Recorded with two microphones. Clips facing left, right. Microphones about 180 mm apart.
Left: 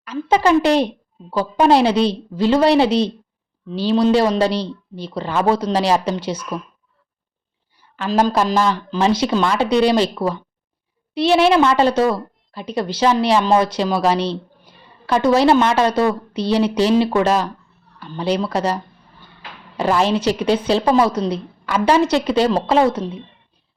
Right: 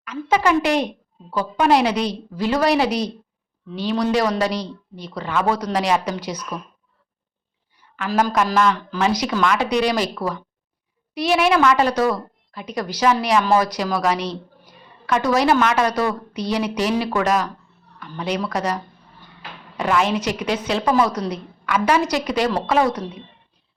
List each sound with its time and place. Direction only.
0.0 s a woman's voice: 30° left (ahead or behind)
7.8 s a woman's voice: 30° left (ahead or behind)